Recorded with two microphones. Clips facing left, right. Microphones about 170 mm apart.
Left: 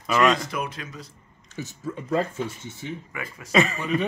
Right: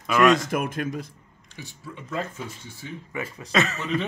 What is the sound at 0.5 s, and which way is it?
Speech, 50° right (ahead or behind).